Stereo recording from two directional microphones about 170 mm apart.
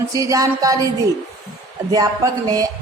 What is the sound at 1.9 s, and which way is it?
Speech, 20° right (ahead or behind).